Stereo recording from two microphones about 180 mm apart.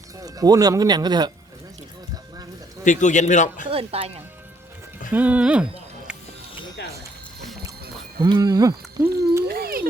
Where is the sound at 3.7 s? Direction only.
30° right (ahead or behind).